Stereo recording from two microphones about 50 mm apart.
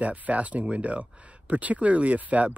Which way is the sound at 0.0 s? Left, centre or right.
Right.